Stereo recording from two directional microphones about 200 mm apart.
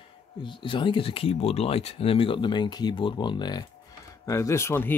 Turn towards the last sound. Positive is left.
turn(degrees=10)  # may be behind; listen again after turning